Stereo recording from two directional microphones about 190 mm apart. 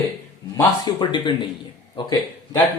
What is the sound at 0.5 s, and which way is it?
A man's voice, 25° left (ahead or behind).